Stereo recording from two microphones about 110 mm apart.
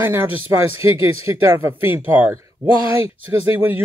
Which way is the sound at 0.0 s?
25° right (ahead or behind).